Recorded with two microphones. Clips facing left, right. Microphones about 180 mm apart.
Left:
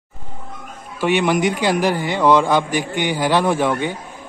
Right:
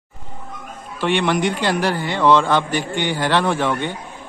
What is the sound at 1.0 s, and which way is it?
A man's voice, 10° left (ahead or behind).